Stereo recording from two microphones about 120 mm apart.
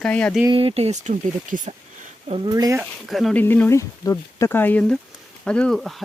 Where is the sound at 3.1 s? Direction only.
Centre (ahead or behind).